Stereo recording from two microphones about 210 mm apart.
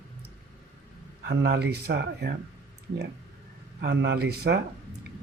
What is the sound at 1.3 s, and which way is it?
Speech, 50° right (ahead or behind).